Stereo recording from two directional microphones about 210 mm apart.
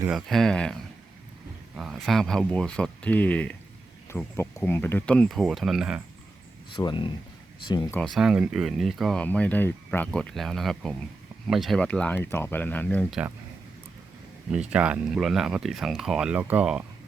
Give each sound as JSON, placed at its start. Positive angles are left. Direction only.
{"t": 0.1, "sound": "speech", "side_deg": 0}
{"t": 6.7, "sound": "speech", "side_deg": 25}
{"t": 7.9, "sound": "speech", "side_deg": 0}
{"t": 14.5, "sound": "speech", "side_deg": -5}